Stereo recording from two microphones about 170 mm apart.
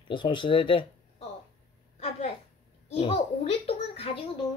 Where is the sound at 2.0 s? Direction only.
35° left (ahead or behind).